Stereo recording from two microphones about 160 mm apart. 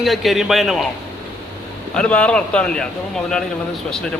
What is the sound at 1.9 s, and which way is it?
Speech, 5° left (ahead or behind).